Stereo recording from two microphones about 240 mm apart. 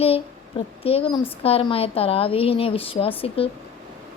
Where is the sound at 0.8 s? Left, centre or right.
Left.